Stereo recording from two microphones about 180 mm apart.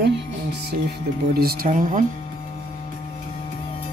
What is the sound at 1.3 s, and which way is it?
Speech, 55° right (ahead or behind).